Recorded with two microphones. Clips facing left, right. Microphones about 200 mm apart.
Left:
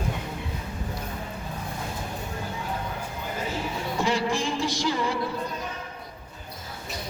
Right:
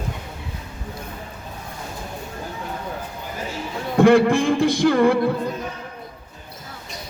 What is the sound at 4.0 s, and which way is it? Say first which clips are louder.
A man's voice: right 13 dB; 55° right (ahead or behind).